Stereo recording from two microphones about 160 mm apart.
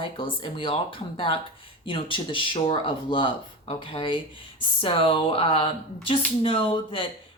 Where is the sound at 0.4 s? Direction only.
30° left (ahead or behind).